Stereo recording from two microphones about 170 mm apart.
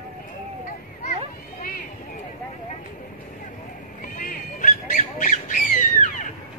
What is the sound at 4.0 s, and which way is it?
Squawk, 50° left (ahead or behind).